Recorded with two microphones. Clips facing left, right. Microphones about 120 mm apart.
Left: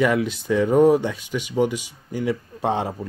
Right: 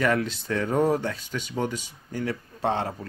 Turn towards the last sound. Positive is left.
turn(degrees=15)  # may be behind; listen again after turning